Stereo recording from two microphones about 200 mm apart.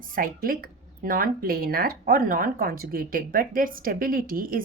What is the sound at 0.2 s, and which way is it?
Speech, 45° right (ahead or behind).